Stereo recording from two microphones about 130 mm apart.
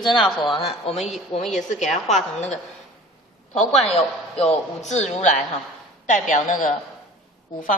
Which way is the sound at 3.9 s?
55° left (ahead or behind).